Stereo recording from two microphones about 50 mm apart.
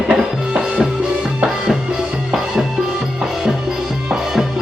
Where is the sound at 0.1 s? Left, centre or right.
Centre.